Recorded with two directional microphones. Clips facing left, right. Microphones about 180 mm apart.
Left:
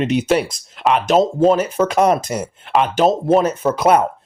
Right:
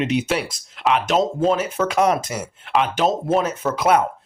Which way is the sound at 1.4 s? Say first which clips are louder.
Left 5 dB; 40° left (ahead or behind).